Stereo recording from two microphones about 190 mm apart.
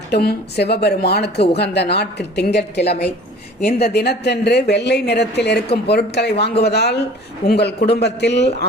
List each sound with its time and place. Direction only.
0.1 s speech: 60° left (ahead or behind)